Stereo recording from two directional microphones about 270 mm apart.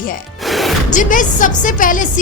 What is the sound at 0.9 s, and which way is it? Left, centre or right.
A woman's voice, left.